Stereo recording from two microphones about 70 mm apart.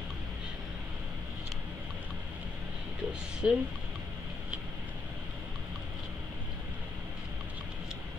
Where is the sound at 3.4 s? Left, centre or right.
Centre.